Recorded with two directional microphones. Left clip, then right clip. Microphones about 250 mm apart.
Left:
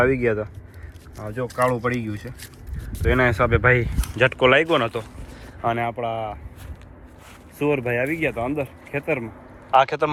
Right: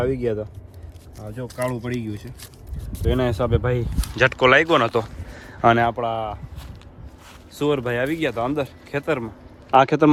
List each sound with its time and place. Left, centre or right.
0.0 s speech: centre
5.6 s speech: right
6.0 s speech: centre
7.6 s speech: centre